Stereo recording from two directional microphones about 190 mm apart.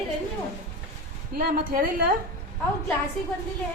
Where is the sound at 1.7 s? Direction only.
50° right (ahead or behind).